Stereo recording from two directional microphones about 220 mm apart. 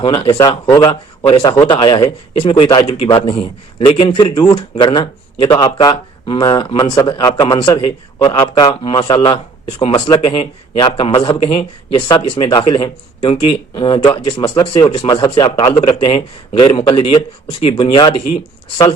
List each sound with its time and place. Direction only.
0.0 s speech: 20° left (ahead or behind)